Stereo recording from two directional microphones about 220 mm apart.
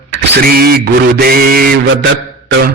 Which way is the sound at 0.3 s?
45° right (ahead or behind).